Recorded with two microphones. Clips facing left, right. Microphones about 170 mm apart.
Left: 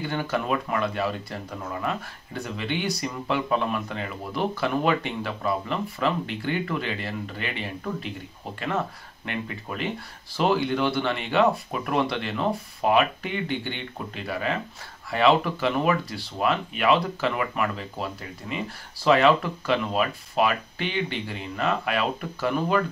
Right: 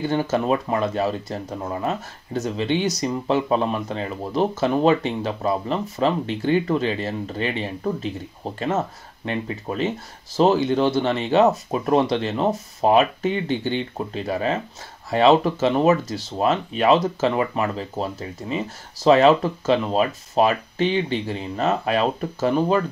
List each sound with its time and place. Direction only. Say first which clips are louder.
0.1 s speech: right 5 dB; 35° right (ahead or behind)
9.2 s speech: right 6 dB; 30° right (ahead or behind)
16.2 s speech: right 4 dB; 40° right (ahead or behind)